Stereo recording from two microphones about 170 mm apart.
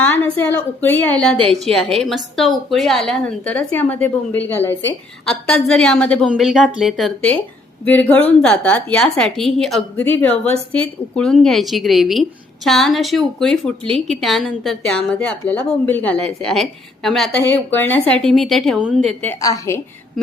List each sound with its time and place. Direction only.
0.0 s a woman's voice: 10° left (ahead or behind)
19.0 s a woman's voice: 10° left (ahead or behind)